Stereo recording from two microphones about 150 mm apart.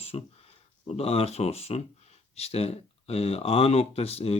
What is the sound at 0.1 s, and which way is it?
Speech, 40° left (ahead or behind).